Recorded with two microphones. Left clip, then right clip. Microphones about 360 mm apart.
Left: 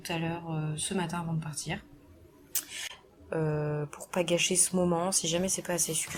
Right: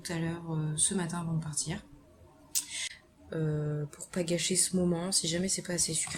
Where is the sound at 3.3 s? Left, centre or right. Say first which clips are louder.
Left 4 dB; left.